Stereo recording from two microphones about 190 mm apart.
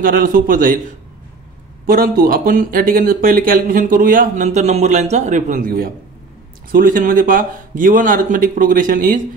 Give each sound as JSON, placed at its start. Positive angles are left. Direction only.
{"t": 0.0, "sound": "speech", "side_deg": -45}
{"t": 1.9, "sound": "speech", "side_deg": -50}